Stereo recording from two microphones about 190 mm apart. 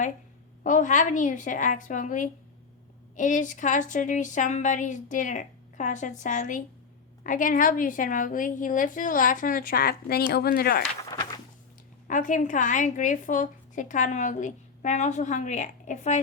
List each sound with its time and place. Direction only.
0.6 s a woman's voice: 40° left (ahead or behind)
11.1 s walk: 20° left (ahead or behind)
12.0 s a woman's voice: 45° left (ahead or behind)